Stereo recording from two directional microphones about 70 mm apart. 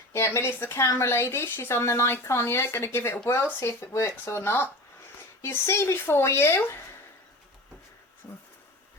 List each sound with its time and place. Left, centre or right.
0.1 s a woman's voice: left
8.3 s speech: left